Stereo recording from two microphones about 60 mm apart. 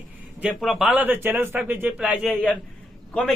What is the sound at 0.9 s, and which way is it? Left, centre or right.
A man's voice, right.